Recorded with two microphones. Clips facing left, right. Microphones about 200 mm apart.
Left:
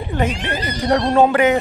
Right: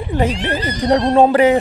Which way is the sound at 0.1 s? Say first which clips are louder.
Right 3 dB; 30° right (ahead or behind).